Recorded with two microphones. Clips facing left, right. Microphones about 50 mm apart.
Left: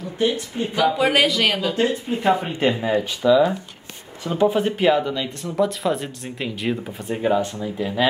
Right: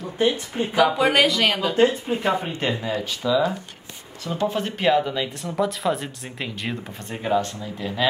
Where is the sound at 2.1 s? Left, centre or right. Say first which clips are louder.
Even; centre.